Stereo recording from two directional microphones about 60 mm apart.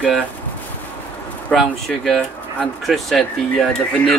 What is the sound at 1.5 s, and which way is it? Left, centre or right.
Speech, centre.